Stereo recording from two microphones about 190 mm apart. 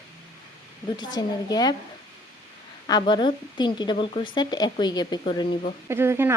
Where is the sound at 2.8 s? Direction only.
20° left (ahead or behind).